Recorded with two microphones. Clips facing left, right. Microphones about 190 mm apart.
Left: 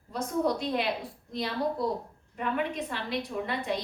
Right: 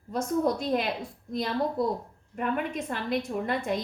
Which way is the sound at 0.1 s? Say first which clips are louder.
Right 2 dB; 45° right (ahead or behind).